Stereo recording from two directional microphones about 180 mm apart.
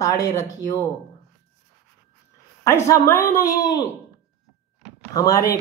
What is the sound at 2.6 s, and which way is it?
Speech, 15° left (ahead or behind).